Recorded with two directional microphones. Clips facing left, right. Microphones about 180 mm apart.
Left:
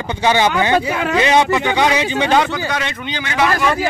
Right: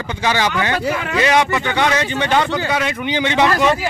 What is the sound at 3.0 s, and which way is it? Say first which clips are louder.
Speech: right 2 dB; 20° right (ahead or behind).